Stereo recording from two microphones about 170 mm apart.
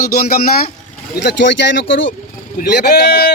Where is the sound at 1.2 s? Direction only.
90° left.